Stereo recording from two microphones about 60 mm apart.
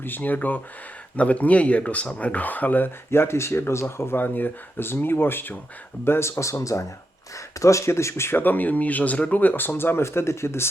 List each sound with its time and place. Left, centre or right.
0.0 s speech: left
8.4 s speech: left